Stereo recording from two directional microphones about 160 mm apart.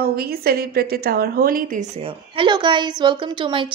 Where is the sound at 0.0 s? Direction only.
70° right (ahead or behind).